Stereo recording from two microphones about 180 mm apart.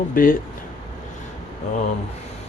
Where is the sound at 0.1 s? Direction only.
50° left (ahead or behind).